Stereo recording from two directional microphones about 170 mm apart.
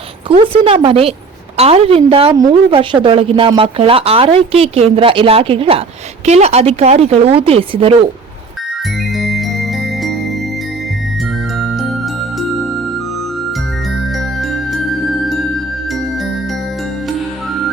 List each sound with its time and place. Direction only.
0.3 s speech: 35° right (ahead or behind)
9.1 s music: centre (ahead or behind)
11.5 s music: centre (ahead or behind)
14.2 s music: centre (ahead or behind)